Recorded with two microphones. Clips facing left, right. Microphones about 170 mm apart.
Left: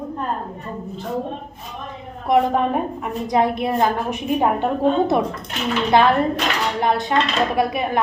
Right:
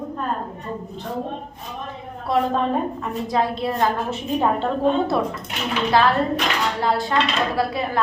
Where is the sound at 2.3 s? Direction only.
15° left (ahead or behind).